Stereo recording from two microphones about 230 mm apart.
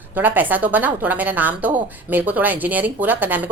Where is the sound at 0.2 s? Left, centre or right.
Centre.